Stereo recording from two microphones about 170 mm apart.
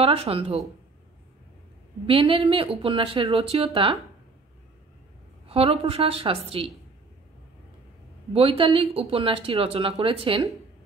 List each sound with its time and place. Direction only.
0.0 s speech: 35° right (ahead or behind)
2.0 s speech: 30° right (ahead or behind)
5.5 s speech: 35° right (ahead or behind)
8.3 s speech: 35° right (ahead or behind)